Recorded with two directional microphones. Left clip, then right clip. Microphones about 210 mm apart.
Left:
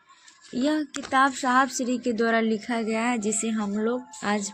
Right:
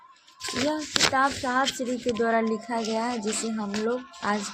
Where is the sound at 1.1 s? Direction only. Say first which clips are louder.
Left 3 dB; 55° left (ahead or behind).